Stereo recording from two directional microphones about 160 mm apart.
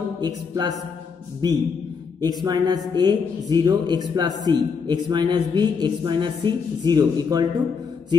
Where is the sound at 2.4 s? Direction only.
25° right (ahead or behind).